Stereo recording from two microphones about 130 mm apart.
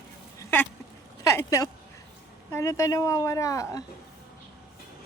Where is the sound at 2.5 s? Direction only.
20° left (ahead or behind).